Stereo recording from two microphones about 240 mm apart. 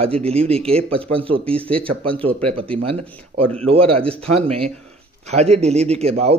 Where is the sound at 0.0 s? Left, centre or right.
Right.